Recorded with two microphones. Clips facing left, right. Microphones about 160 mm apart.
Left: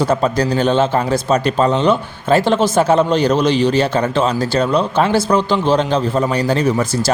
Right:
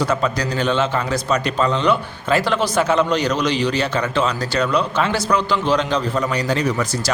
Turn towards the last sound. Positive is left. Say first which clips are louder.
# left 5 dB
turn(degrees=25)  # may be behind; listen again after turning